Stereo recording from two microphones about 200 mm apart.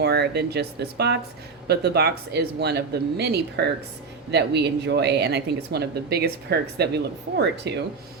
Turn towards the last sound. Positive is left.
turn(degrees=-55)  # may be behind; listen again after turning